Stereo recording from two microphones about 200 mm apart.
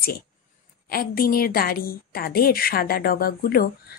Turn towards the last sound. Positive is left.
turn(degrees=45)  # may be behind; listen again after turning